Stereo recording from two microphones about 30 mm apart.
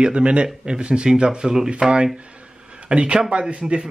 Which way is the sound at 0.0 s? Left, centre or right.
Right.